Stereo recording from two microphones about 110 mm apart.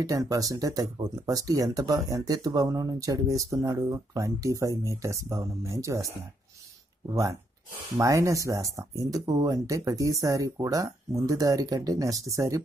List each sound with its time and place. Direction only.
0.0 s speech: 30° right (ahead or behind)
8.0 s speech: 30° right (ahead or behind)